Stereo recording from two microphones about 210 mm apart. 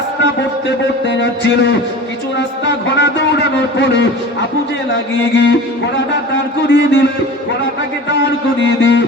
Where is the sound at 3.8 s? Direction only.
60° left (ahead or behind).